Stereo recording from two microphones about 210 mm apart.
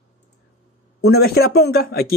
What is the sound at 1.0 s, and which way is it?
Speech, 50° left (ahead or behind).